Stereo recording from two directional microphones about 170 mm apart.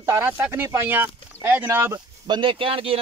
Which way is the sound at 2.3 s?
30° right (ahead or behind).